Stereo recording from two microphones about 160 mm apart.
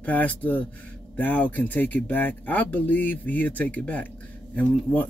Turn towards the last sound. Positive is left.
turn(degrees=10)  # may be behind; listen again after turning